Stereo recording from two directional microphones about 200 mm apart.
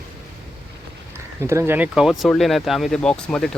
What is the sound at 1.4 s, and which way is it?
Speech, 15° right (ahead or behind).